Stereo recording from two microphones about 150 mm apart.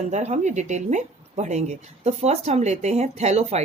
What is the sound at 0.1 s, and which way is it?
Speech, 50° right (ahead or behind).